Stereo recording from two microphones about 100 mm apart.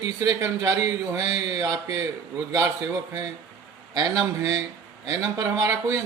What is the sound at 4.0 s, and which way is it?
Speech, 40° right (ahead or behind).